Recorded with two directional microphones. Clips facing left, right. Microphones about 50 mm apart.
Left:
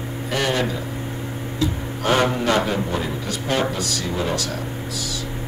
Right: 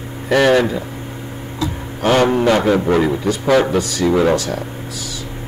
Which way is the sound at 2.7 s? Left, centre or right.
Right.